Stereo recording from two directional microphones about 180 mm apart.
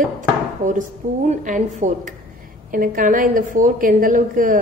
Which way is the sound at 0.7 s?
45° right (ahead or behind).